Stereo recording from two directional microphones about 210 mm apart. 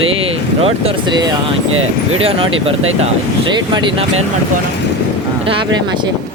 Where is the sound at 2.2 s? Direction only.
25° right (ahead or behind).